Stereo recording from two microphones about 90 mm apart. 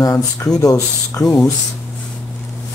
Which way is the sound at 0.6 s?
40° left (ahead or behind).